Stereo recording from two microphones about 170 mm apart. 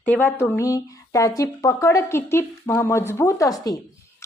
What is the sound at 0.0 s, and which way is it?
A woman's voice, 10° left (ahead or behind).